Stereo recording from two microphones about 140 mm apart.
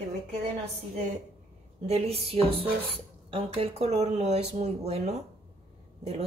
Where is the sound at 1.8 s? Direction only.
45° right (ahead or behind).